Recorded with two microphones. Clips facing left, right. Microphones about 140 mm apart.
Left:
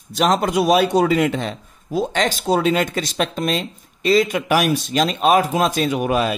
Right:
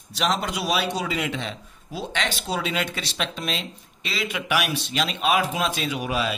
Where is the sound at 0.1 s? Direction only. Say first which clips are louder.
Left 8 dB; 45° left (ahead or behind).